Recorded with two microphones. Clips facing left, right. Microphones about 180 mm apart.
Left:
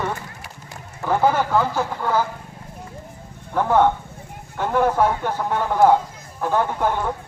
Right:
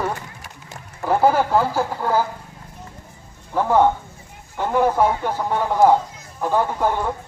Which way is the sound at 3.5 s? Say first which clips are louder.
Right 1 dB; 10° right (ahead or behind).